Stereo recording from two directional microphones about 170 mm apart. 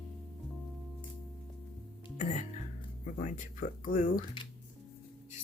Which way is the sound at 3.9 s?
50° left (ahead or behind).